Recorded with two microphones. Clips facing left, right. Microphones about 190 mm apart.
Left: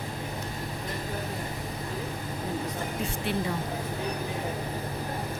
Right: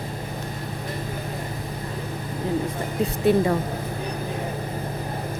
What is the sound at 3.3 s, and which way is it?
Speech, 45° right (ahead or behind).